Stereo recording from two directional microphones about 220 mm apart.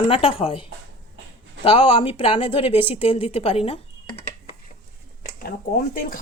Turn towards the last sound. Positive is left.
turn(degrees=40)  # may be behind; listen again after turning